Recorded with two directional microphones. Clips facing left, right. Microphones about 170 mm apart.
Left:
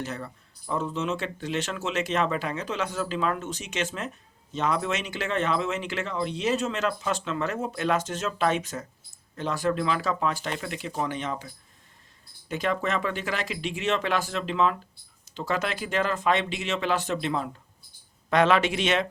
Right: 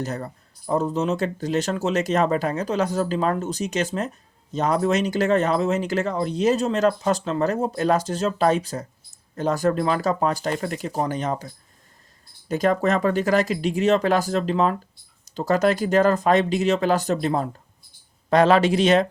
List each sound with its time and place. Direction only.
0.0 s speech: 45° right (ahead or behind)
12.5 s speech: 40° right (ahead or behind)